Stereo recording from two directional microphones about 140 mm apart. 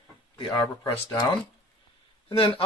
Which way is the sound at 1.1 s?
30° left (ahead or behind).